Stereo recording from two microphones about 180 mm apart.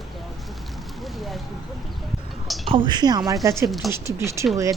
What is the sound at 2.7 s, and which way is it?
Speech, 25° right (ahead or behind).